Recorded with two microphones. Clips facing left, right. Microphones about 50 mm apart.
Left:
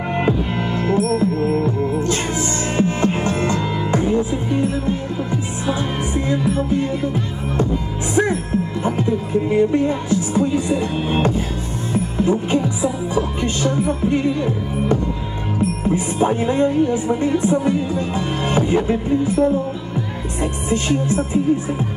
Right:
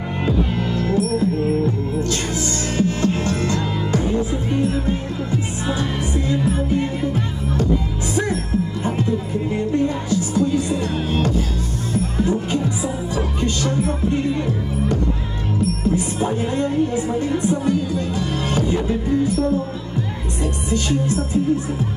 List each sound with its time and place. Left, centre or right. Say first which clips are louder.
0.2 s music: right 1 dB; left
5.3 s music: even; left
8.1 s music: left 4 dB; left
9.5 s music: left 4 dB; left
15.6 s speech: left 1 dB; left
20.7 s speech: left 2 dB; left